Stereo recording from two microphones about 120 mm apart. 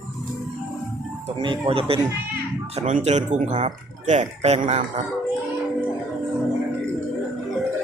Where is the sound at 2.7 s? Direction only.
75° right (ahead or behind).